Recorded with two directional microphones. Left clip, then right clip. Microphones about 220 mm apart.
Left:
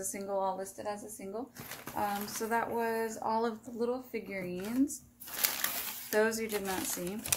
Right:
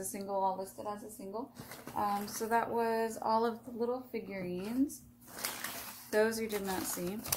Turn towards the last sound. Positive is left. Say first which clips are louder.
# left 2 dB
turn(degrees=5)  # may be behind; listen again after turning